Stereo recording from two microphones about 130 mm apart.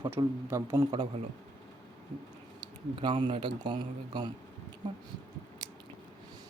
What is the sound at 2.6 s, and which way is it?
Speech, 40° right (ahead or behind).